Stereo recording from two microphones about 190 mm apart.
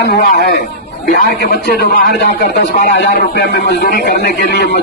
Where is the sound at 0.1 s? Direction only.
55° left (ahead or behind).